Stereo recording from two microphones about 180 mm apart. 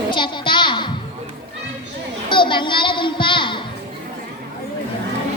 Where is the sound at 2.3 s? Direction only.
25° left (ahead or behind).